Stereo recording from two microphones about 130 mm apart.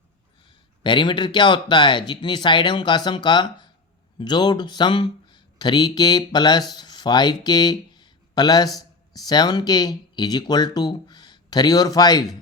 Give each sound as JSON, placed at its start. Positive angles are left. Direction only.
{"t": 0.4, "sound": "speech", "side_deg": 40}